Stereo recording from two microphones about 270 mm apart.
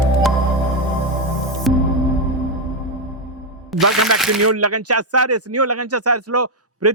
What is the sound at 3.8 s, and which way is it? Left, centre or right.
Speech, right.